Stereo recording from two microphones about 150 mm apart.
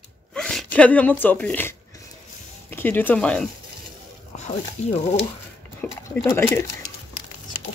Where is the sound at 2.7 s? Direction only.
10° left (ahead or behind).